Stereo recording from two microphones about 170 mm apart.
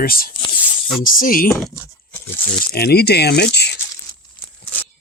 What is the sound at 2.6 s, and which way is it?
Speech, 65° left (ahead or behind).